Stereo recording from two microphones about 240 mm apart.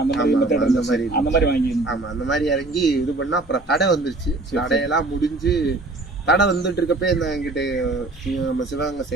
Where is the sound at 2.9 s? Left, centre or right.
Left.